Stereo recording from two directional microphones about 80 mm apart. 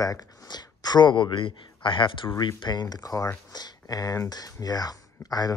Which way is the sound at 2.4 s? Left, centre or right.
Left.